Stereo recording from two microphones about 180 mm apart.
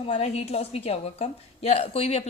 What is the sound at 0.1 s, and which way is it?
A woman's voice, 35° left (ahead or behind).